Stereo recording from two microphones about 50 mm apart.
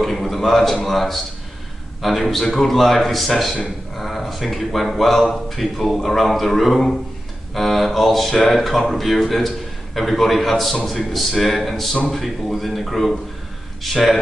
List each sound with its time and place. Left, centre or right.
0.0 s speech: centre